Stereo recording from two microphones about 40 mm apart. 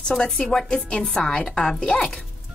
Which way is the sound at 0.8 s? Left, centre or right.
Left.